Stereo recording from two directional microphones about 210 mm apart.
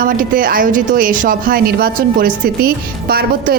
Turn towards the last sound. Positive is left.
turn(degrees=-45)  # may be behind; listen again after turning